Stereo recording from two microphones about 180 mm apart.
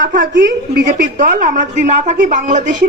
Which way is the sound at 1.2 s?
45° right (ahead or behind).